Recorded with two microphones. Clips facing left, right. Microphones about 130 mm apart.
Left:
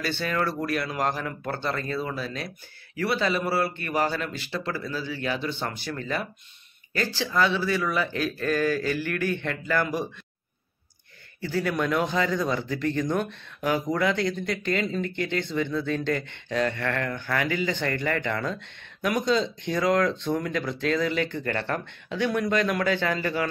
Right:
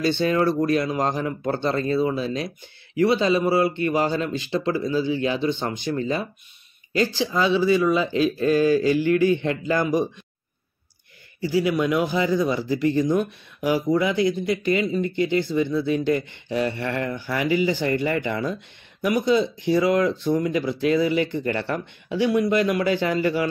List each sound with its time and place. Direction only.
0.0 s a man's voice: 25° right (ahead or behind)
1.7 s a man's voice: 30° right (ahead or behind)
11.4 s a man's voice: 10° right (ahead or behind)